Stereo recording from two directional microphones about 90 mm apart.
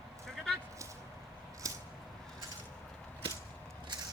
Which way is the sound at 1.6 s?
40° right (ahead or behind).